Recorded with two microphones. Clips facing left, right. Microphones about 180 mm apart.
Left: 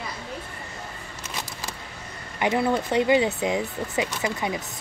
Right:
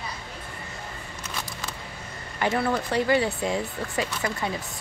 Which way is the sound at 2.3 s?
15° left (ahead or behind).